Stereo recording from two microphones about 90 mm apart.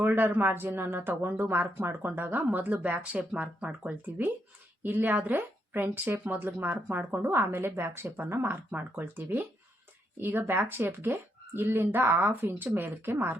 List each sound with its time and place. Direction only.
0.0 s speech: 20° right (ahead or behind)